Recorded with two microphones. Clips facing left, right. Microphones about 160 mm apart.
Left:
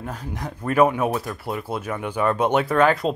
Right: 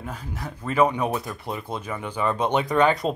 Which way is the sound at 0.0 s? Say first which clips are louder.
Left 3 dB; 10° left (ahead or behind).